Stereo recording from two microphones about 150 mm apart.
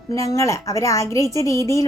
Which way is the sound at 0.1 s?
20° left (ahead or behind).